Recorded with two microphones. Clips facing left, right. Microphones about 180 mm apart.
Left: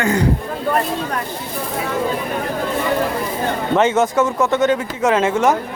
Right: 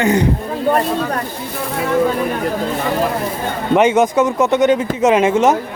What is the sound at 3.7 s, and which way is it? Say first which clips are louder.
Speech: right 3 dB; 15° right (ahead or behind).